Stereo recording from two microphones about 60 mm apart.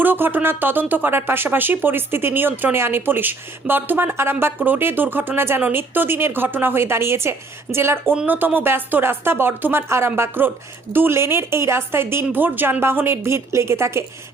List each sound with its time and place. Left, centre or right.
0.0 s speech: right
8.3 s a woman's voice: right